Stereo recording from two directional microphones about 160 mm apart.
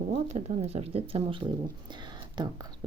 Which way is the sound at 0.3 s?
40° right (ahead or behind).